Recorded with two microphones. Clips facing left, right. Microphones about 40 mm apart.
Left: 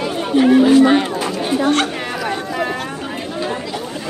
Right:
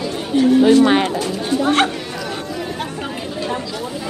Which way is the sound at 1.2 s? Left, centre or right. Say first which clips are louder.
Left 1 dB; left.